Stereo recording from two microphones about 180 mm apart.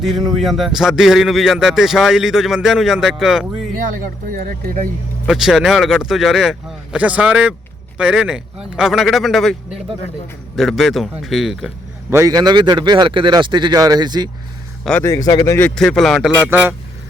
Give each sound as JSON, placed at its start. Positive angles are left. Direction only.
{"t": 0.3, "sound": "speech", "side_deg": 0}
{"t": 3.8, "sound": "speech", "side_deg": -50}
{"t": 5.2, "sound": "speech", "side_deg": 0}
{"t": 12.1, "sound": "a man's voice", "side_deg": -20}
{"t": 14.8, "sound": "speech", "side_deg": 10}
{"t": 16.5, "sound": "speech", "side_deg": -10}